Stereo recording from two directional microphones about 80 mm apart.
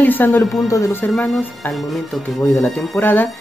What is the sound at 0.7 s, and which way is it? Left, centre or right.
Speech, left.